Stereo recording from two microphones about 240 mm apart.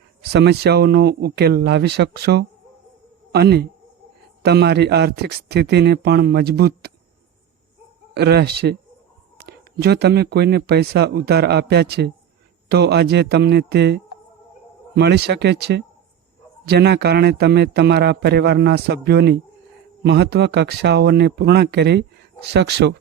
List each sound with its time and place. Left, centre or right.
0.2 s a man's voice: right
8.1 s a man's voice: right